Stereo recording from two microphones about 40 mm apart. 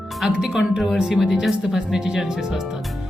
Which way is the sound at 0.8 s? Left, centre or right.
Centre.